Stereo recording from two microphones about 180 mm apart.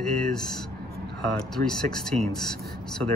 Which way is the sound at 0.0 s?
5° left (ahead or behind).